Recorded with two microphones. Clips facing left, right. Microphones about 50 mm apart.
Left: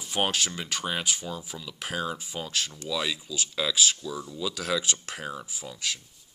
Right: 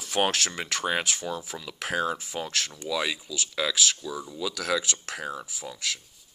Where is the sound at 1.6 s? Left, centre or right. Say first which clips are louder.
Right 4 dB; right.